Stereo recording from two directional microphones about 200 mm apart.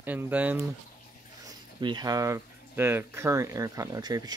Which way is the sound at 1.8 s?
20° right (ahead or behind).